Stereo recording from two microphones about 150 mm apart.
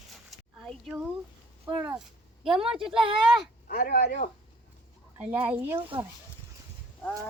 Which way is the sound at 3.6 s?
70° left (ahead or behind).